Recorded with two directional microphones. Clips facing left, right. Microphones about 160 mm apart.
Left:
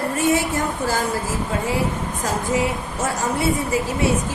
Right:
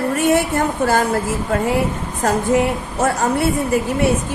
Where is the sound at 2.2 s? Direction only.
60° right (ahead or behind).